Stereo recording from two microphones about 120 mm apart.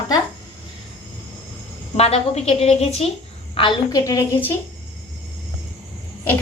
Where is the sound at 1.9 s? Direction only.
60° left (ahead or behind).